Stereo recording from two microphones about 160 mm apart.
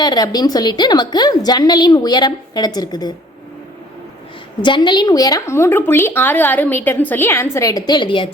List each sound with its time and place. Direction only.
0.0 s a woman's voice: 25° left (ahead or behind)
4.6 s a woman's voice: 30° left (ahead or behind)